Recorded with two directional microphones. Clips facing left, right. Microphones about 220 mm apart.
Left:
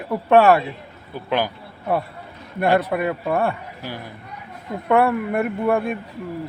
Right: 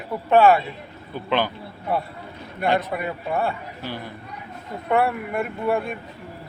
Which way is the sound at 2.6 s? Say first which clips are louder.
Left 4 dB; 55° left (ahead or behind).